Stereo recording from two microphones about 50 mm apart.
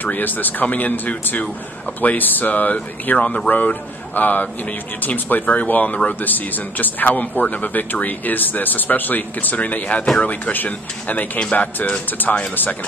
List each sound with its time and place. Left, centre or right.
0.0 s speech: left